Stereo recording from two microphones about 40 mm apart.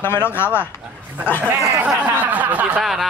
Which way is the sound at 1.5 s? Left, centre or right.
Right.